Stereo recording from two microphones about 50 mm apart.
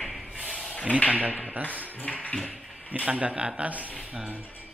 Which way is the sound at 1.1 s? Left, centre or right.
Right.